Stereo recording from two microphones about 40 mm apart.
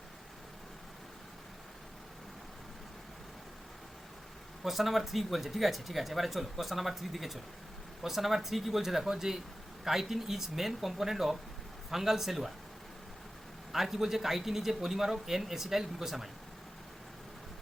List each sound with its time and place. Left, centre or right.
4.6 s a man's voice: centre
13.7 s a man's voice: centre